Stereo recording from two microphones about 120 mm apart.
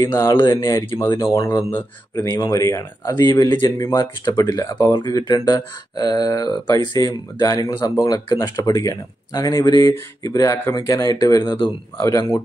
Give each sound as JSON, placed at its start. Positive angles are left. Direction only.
{"t": 0.0, "sound": "speech", "side_deg": 20}
{"t": 1.0, "sound": "speech", "side_deg": 40}
{"t": 1.3, "sound": "speech", "side_deg": 25}